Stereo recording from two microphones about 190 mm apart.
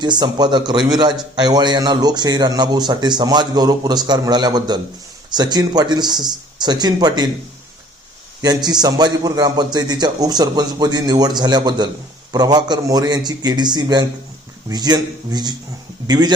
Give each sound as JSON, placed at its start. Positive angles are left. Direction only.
{"t": 0.0, "sound": "a man's voice", "side_deg": -20}
{"t": 8.4, "sound": "a man's voice", "side_deg": -20}